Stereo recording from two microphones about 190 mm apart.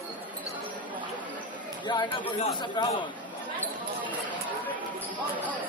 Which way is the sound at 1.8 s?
25° left (ahead or behind).